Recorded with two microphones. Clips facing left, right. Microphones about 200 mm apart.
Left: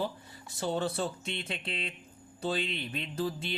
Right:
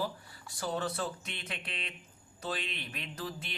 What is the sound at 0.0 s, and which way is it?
Speech, 25° left (ahead or behind).